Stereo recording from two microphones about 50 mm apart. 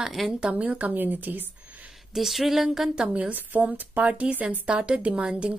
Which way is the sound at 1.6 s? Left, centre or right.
Right.